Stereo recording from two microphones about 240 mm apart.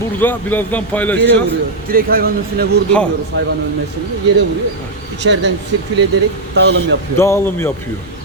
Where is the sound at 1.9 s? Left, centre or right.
Right.